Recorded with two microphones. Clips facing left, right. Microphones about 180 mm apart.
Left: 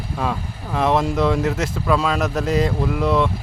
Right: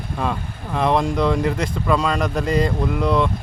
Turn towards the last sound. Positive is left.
turn(degrees=0)  # may be behind; listen again after turning